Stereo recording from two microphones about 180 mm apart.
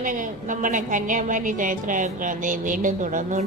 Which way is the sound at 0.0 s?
45° right (ahead or behind).